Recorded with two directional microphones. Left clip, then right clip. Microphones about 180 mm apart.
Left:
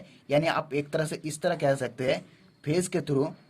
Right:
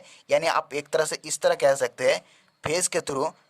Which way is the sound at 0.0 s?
30° right (ahead or behind).